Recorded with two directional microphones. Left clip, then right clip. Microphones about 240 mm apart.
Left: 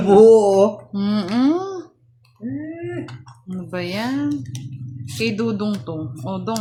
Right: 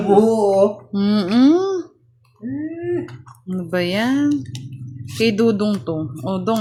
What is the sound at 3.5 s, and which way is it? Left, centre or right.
Speech, right.